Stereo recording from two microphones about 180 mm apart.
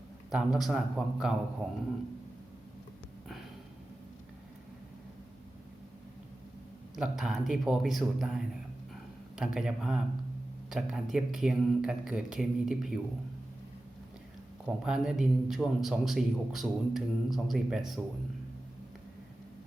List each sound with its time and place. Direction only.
0.3 s a man's voice: centre (ahead or behind)
6.9 s a man's voice: centre (ahead or behind)
14.8 s a man's voice: 5° right (ahead or behind)